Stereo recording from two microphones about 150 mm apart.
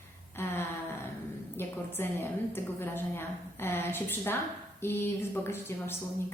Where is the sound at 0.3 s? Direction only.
15° left (ahead or behind).